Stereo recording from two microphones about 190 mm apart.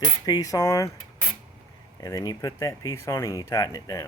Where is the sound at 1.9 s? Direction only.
20° left (ahead or behind).